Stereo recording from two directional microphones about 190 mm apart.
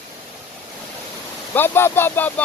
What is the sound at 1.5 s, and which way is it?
Speech, 10° left (ahead or behind).